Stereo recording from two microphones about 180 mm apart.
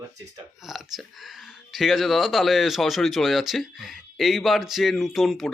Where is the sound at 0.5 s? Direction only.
Centre (ahead or behind).